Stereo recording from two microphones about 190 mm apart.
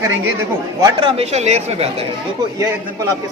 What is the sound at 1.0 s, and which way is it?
Speech, 35° right (ahead or behind).